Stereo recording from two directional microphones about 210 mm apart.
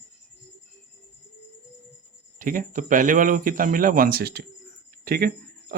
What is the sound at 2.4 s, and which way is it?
A man's voice, 40° right (ahead or behind).